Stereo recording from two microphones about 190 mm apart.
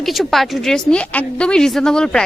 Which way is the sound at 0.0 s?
Centre (ahead or behind).